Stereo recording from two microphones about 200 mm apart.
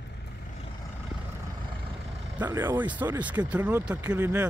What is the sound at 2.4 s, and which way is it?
Speech, 10° right (ahead or behind).